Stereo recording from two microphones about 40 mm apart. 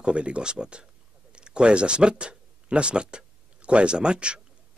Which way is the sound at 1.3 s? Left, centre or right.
Right.